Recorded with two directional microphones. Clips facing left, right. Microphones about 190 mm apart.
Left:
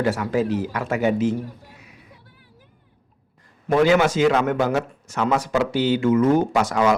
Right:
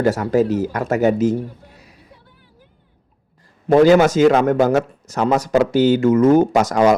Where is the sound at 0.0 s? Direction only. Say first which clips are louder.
Right 5 dB; 40° right (ahead or behind).